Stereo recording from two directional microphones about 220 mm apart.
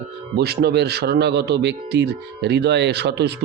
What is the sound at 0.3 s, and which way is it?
Speech, 50° right (ahead or behind).